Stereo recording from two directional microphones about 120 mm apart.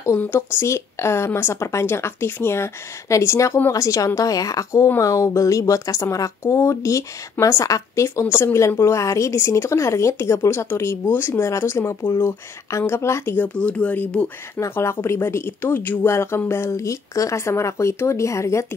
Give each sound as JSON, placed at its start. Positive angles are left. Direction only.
{"t": 0.0, "sound": "speech", "side_deg": 15}
{"t": 14.6, "sound": "speech", "side_deg": 20}